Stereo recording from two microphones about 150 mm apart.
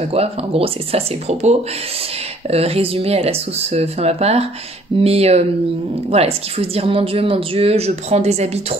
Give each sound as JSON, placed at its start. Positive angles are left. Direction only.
{"t": 0.1, "sound": "speech", "side_deg": -40}